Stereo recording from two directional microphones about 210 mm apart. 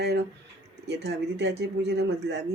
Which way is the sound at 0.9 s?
55° right (ahead or behind).